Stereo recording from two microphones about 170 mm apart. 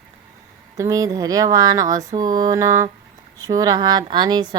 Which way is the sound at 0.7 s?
20° right (ahead or behind).